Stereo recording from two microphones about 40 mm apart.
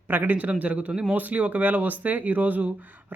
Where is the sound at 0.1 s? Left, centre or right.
Right.